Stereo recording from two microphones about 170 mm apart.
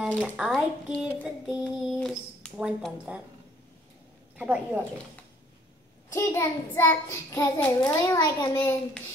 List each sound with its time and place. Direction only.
0.4 s speech: 5° right (ahead or behind)
4.4 s a woman's voice: 10° right (ahead or behind)
6.1 s a child's voice: 15° left (ahead or behind)